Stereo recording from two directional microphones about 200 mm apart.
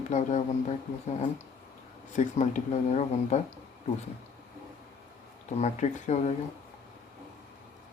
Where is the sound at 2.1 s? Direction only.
35° left (ahead or behind).